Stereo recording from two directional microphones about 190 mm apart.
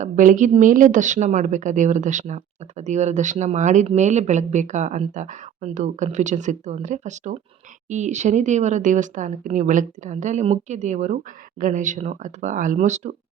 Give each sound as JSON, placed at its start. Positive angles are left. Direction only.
{"t": 0.0, "sound": "a woman's voice", "side_deg": -40}